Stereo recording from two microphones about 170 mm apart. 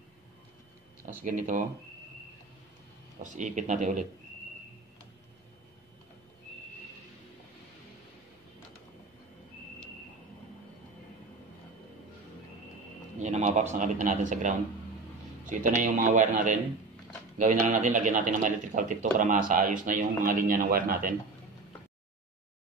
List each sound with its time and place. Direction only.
1.0 s speech: 50° right (ahead or behind)
3.2 s speech: 45° right (ahead or behind)
13.2 s a man's voice: 45° right (ahead or behind)
15.6 s speech: 50° right (ahead or behind)